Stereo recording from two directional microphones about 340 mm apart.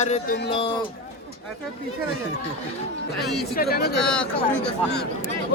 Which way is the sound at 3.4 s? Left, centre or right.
Left.